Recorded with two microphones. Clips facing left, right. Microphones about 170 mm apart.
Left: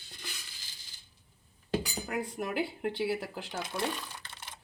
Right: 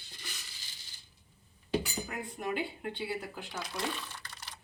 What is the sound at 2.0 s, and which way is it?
Speech, 75° left (ahead or behind).